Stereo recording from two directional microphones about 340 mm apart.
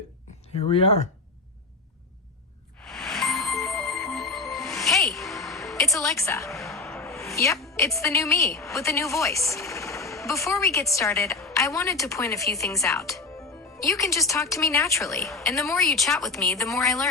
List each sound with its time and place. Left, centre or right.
0.7 s speech: centre
2.8 s music: centre
13.8 s a woman's voice: centre